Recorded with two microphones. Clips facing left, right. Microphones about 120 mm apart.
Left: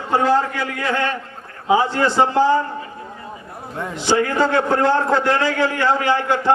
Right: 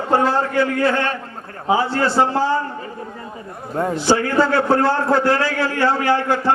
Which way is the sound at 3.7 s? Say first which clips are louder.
Right 7 dB; 40° right (ahead or behind).